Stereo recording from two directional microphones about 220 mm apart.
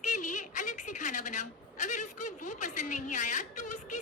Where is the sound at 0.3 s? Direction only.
35° left (ahead or behind).